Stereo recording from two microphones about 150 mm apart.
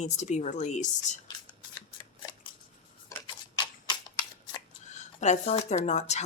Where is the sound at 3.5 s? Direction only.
30° left (ahead or behind).